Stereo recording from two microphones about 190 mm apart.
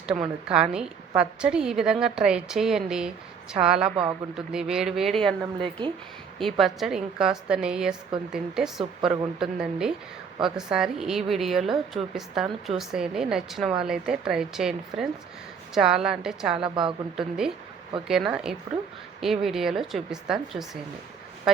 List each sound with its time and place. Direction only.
0.4 s a woman's voice: 5° right (ahead or behind)
5.5 s a woman's voice: 25° right (ahead or behind)
6.4 s a woman's voice: centre (ahead or behind)